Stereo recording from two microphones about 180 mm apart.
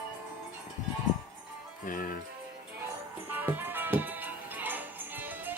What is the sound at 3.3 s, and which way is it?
Music, 10° right (ahead or behind).